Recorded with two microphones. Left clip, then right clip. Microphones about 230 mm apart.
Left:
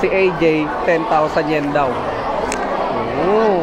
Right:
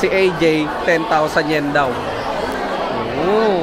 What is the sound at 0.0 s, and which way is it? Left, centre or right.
Speech, right.